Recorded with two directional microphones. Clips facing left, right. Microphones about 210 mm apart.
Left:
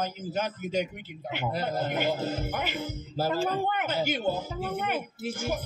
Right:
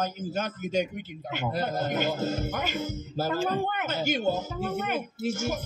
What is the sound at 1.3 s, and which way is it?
Speech, 45° right (ahead or behind).